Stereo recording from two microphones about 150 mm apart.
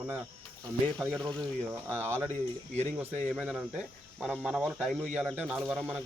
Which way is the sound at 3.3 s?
5° right (ahead or behind).